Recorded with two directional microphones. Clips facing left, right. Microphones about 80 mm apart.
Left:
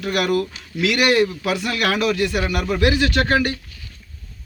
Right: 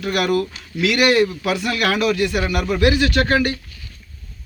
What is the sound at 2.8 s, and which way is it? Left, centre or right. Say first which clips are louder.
Speech: right 2 dB; left.